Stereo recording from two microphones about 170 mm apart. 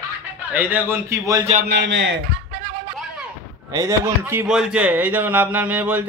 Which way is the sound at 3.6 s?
20° right (ahead or behind).